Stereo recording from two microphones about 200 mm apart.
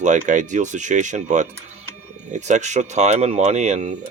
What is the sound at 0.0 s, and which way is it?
Speech, 40° right (ahead or behind).